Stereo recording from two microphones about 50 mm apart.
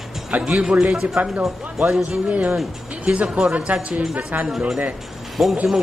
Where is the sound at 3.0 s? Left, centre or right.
Right.